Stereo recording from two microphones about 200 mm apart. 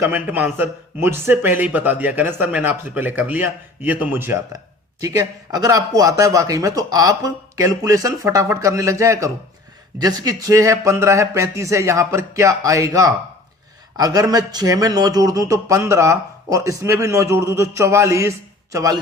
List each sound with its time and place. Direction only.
0.0 s speech: 10° right (ahead or behind)